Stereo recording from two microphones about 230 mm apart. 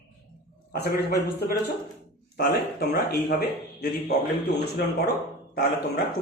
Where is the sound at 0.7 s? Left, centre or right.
Left.